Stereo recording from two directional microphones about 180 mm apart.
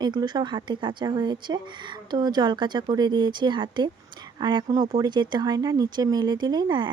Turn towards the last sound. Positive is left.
turn(degrees=-25)  # may be behind; listen again after turning